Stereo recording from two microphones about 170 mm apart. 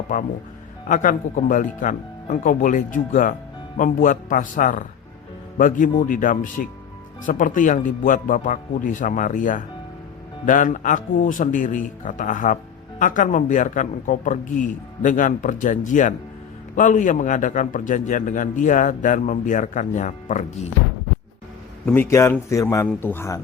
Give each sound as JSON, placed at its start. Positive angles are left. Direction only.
{"t": 0.1, "sound": "a man's voice", "side_deg": 55}
{"t": 21.8, "sound": "a man's voice", "side_deg": 15}